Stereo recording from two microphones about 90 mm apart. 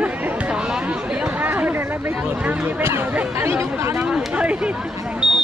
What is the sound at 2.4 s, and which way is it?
Speech, 15° right (ahead or behind).